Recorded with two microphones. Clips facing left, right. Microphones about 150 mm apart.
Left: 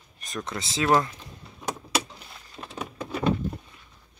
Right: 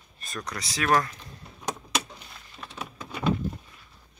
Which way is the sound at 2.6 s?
35° left (ahead or behind).